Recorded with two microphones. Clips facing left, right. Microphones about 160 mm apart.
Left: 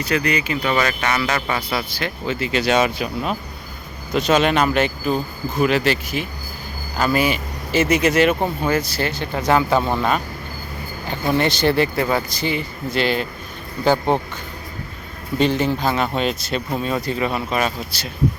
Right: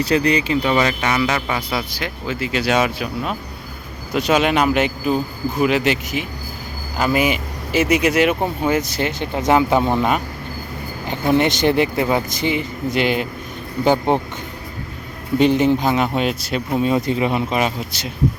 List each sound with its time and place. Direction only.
0.0 s speech: 30° right (ahead or behind)
0.6 s speech: 20° right (ahead or behind); by 3.3 s centre (ahead or behind)
4.1 s speech: 10° right (ahead or behind)
15.4 s speech: 15° right (ahead or behind)